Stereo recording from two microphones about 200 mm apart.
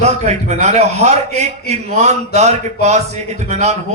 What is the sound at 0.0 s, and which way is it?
A man's voice, 35° right (ahead or behind).